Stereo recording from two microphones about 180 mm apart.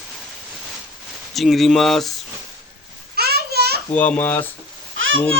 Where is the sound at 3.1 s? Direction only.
60° right (ahead or behind).